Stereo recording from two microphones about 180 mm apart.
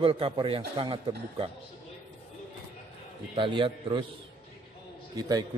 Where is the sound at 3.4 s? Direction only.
30° right (ahead or behind).